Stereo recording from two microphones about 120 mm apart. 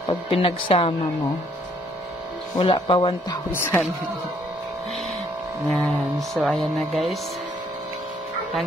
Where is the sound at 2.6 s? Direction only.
45° left (ahead or behind).